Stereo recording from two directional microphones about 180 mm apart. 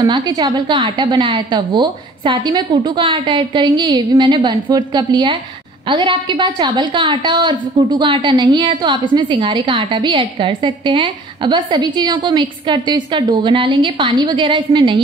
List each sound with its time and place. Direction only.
0.0 s a woman's voice: 20° right (ahead or behind)